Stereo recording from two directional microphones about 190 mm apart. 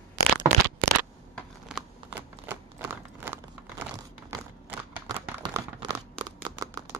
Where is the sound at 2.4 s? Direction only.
10° right (ahead or behind).